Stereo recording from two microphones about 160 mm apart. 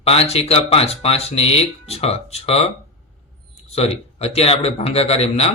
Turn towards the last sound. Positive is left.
turn(degrees=40)  # may be behind; listen again after turning